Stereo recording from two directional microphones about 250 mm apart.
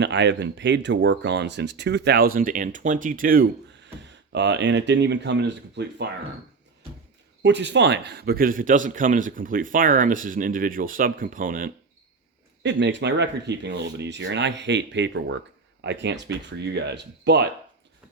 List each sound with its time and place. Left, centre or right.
0.0 s speech: right
7.4 s speech: right
12.6 s speech: right